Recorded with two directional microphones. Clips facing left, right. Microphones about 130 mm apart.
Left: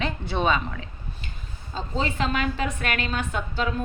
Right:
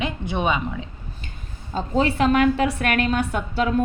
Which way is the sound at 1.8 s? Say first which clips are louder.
Right 7 dB; 55° right (ahead or behind).